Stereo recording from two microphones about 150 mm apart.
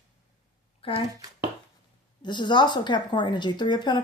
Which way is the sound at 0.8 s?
40° left (ahead or behind).